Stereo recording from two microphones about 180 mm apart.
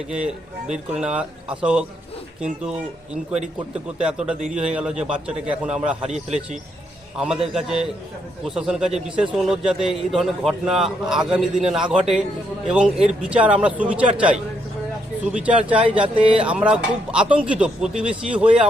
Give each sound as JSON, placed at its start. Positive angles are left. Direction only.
{"t": 0.1, "sound": "a man's voice", "side_deg": -5}
{"t": 3.9, "sound": "a man's voice", "side_deg": -5}
{"t": 6.1, "sound": "speech", "side_deg": -40}
{"t": 7.2, "sound": "a man's voice", "side_deg": -5}
{"t": 16.2, "sound": "speech", "side_deg": -30}
{"t": 16.5, "sound": "a man's voice", "side_deg": -5}